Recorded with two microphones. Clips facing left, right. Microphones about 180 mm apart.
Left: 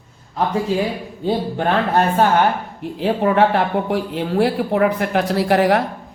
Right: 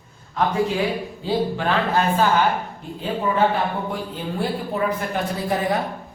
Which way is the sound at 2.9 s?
75° left (ahead or behind).